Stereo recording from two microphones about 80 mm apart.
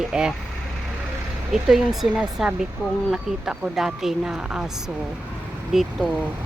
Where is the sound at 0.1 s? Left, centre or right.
Centre.